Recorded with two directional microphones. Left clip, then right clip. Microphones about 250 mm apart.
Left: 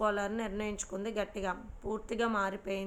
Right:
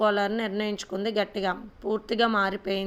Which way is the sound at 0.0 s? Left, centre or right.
Right.